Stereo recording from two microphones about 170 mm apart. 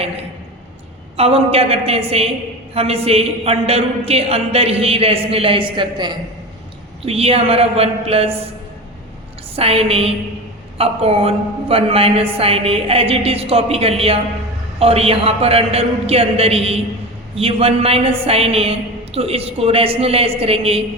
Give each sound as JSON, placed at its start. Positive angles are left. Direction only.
{"t": 1.1, "sound": "a woman's voice", "side_deg": -35}
{"t": 9.6, "sound": "a woman's voice", "side_deg": -35}